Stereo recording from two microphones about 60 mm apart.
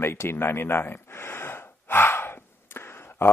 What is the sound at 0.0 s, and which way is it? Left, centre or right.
Speech, left.